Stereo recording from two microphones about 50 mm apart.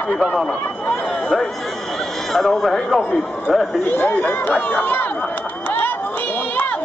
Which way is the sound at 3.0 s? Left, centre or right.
Centre.